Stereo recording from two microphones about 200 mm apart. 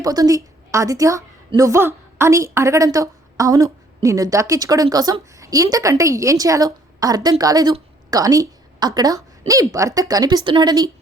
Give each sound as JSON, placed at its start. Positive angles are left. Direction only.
{"t": 0.0, "sound": "a woman's voice", "side_deg": -20}